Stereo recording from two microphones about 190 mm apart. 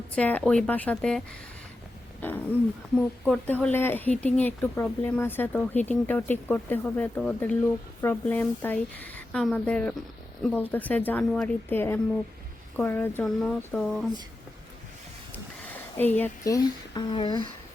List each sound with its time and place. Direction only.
0.2 s speech: 5° left (ahead or behind)
2.2 s speech: 10° left (ahead or behind)
15.7 s speech: 10° left (ahead or behind)